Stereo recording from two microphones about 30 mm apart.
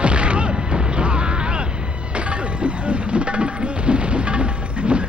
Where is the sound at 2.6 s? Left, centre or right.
Right.